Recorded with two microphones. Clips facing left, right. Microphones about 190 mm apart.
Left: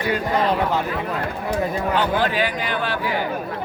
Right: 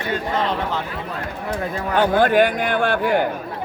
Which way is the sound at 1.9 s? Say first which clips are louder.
Right 8 dB; 55° right (ahead or behind).